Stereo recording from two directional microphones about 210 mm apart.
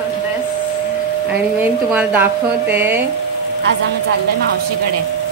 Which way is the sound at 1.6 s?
10° right (ahead or behind).